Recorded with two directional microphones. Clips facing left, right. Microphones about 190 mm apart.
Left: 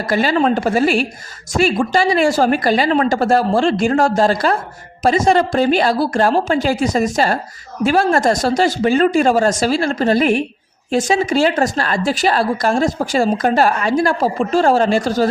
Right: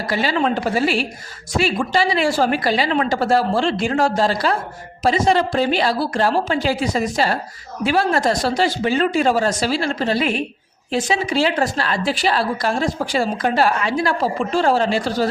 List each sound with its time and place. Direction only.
0.1 s a woman's voice: 50° left (ahead or behind)